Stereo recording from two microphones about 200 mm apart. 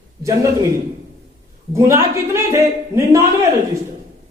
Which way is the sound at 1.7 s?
15° right (ahead or behind).